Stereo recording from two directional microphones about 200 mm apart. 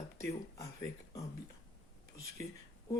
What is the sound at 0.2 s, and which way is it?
Speech, 15° left (ahead or behind).